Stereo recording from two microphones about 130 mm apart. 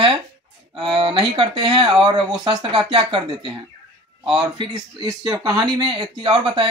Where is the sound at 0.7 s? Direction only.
40° right (ahead or behind).